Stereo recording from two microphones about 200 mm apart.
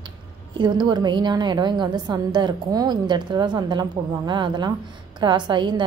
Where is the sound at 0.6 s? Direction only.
20° right (ahead or behind).